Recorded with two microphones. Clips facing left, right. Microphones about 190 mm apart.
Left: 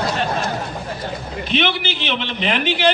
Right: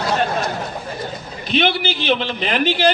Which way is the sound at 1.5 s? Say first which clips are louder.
Right 2 dB; 40° right (ahead or behind).